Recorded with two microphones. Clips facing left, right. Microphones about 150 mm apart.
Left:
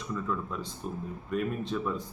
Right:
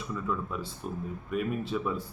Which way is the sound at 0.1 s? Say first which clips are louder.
Even; 5° right (ahead or behind).